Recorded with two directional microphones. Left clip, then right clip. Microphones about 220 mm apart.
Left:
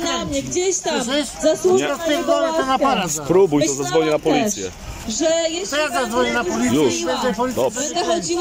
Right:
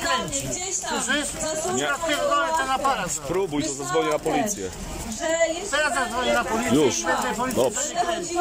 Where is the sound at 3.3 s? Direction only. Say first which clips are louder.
Left 12 dB; 20° left (ahead or behind).